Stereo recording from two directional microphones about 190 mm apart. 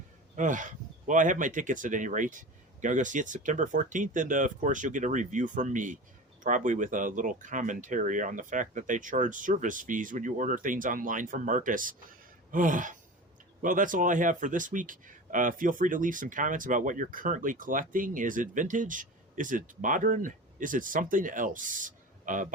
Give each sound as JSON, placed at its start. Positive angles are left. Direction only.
{"t": 0.3, "sound": "speech", "side_deg": -40}